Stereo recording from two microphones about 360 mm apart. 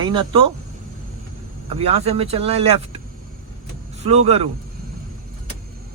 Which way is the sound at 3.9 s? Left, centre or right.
Centre.